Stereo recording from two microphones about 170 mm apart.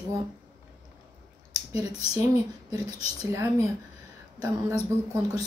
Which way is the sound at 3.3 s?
15° right (ahead or behind).